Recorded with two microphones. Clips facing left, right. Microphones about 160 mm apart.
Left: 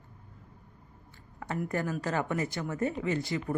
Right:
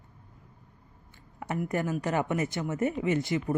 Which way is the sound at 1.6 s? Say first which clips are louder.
Right 3 dB; 20° right (ahead or behind).